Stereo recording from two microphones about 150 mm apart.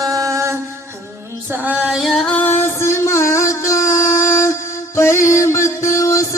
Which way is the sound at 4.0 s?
55° left (ahead or behind).